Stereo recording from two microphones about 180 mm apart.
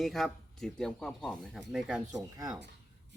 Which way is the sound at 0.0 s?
Centre (ahead or behind).